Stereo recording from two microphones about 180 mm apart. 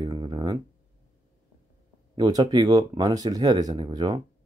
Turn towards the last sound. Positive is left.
turn(degrees=-25)  # may be behind; listen again after turning